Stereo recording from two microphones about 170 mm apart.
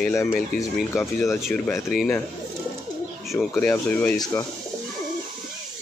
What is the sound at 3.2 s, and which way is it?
Bird, centre (ahead or behind).